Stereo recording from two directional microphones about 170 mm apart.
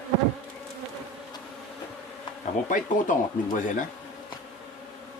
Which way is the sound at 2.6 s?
50° left (ahead or behind).